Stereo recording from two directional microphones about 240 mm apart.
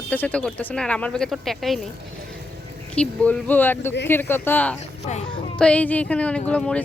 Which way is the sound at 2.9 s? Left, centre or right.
Centre.